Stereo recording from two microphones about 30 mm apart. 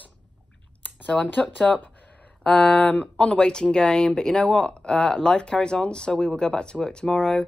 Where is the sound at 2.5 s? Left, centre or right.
Left.